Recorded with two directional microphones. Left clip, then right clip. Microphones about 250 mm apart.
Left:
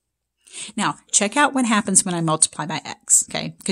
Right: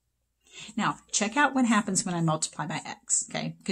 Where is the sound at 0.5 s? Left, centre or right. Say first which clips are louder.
Left 6 dB; left.